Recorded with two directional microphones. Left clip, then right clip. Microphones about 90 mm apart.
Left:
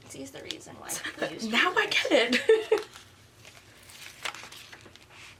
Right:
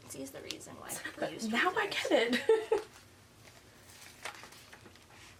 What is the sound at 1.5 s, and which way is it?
Speech, 40° left (ahead or behind).